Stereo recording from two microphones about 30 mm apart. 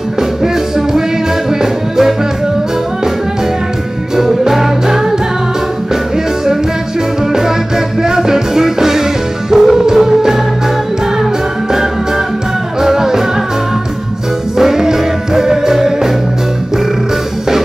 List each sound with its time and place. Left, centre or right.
0.4 s music: centre
4.2 s music: centre
8.0 s music: centre
12.8 s music: centre
14.6 s music: centre